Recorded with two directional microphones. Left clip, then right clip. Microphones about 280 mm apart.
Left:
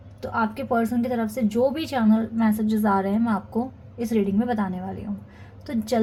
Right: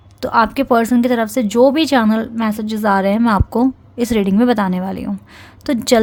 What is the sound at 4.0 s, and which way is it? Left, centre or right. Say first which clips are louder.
Speech: right 9 dB; right.